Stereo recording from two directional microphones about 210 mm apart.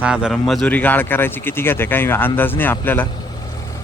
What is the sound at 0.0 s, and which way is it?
Speech, 5° right (ahead or behind).